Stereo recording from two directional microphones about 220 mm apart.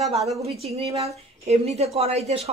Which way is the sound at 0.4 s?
30° right (ahead or behind).